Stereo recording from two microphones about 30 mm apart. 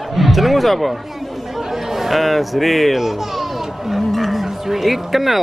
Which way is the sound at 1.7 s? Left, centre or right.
Centre.